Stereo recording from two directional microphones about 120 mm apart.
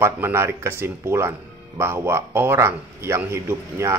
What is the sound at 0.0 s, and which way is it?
Speech, 20° right (ahead or behind).